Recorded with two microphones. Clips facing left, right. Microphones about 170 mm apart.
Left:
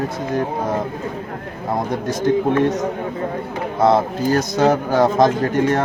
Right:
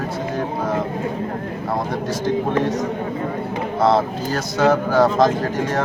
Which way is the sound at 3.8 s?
45° left (ahead or behind).